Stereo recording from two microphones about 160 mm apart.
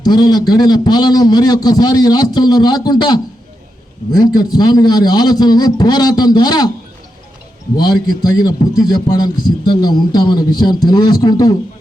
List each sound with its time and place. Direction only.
0.0 s a man's voice: 25° left (ahead or behind)
7.8 s a man's voice: 25° left (ahead or behind)